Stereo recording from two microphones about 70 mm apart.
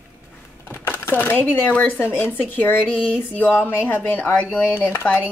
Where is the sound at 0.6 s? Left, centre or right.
Left.